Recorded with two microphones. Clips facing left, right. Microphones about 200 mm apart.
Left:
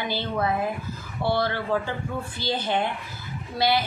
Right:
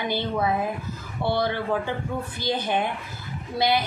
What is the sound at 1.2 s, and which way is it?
Speech, 15° right (ahead or behind).